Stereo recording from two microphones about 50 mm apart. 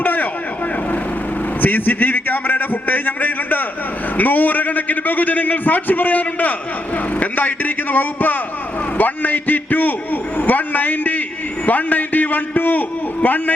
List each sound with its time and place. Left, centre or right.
0.0 s vehicle: left
1.6 s a man's voice: left